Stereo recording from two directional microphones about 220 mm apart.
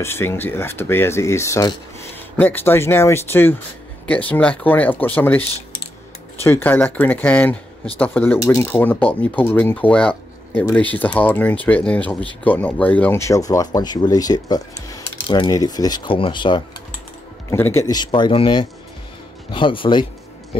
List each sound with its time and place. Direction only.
0.0 s speech: 10° left (ahead or behind)
6.4 s speech: 10° left (ahead or behind)